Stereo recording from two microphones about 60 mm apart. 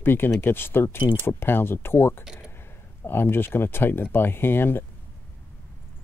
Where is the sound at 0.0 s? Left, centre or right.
Left.